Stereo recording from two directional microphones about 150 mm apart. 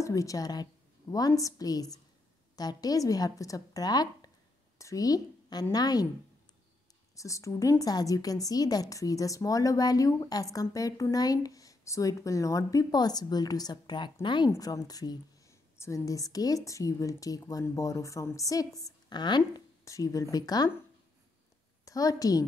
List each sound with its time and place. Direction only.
0.0 s a woman's voice: 20° left (ahead or behind)
7.2 s a woman's voice: 20° left (ahead or behind)
21.8 s a woman's voice: 25° left (ahead or behind)